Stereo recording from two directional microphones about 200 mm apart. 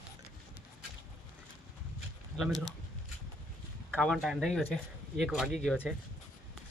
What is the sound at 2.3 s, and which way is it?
Speech, centre (ahead or behind).